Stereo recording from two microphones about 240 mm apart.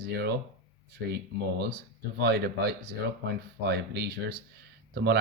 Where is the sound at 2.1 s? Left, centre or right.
Right.